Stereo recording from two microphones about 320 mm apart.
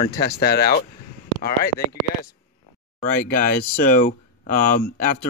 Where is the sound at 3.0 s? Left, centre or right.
Left.